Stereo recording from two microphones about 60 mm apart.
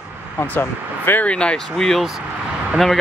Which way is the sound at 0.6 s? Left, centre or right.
Left.